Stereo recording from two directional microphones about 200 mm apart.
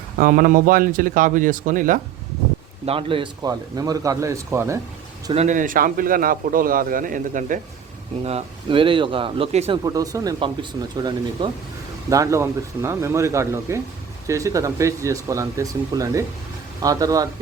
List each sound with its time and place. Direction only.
0.2 s a man's voice: 45° right (ahead or behind)
2.8 s speech: 25° right (ahead or behind)
5.3 s a man's voice: 35° right (ahead or behind)
8.2 s speech: 30° right (ahead or behind)
9.8 s speech: 15° right (ahead or behind)